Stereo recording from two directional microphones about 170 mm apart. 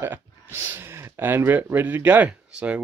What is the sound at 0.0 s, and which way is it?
Speech, 15° right (ahead or behind).